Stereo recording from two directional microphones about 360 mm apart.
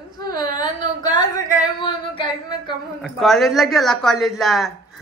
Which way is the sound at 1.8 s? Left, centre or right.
Centre.